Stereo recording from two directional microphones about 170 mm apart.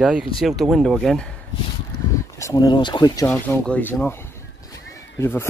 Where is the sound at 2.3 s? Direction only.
20° left (ahead or behind).